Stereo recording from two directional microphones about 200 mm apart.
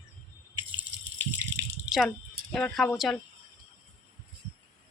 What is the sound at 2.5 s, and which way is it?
Speech, centre (ahead or behind).